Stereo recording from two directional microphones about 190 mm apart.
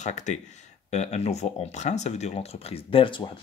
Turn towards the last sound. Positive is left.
turn(degrees=25)  # may be behind; listen again after turning